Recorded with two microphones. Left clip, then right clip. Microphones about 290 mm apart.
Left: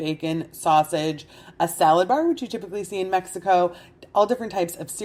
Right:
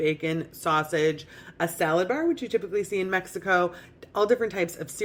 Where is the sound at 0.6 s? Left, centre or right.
Left.